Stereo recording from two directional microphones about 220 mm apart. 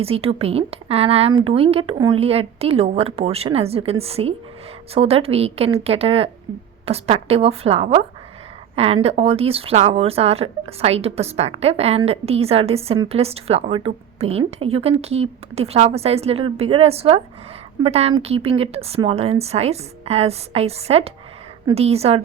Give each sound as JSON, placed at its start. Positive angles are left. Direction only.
{"t": 0.0, "sound": "speech", "side_deg": -25}